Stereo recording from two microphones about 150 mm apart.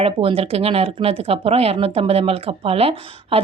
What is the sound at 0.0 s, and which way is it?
Speech, 40° right (ahead or behind).